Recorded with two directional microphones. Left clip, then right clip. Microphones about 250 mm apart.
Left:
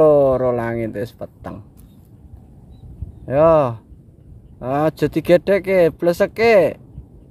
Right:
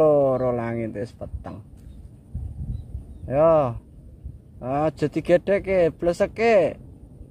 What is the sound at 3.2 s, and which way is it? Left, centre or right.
Speech, centre.